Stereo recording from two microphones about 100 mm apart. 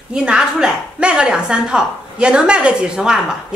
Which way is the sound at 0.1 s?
10° right (ahead or behind).